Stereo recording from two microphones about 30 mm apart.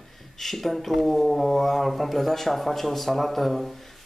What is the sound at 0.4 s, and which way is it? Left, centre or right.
A man's voice, centre.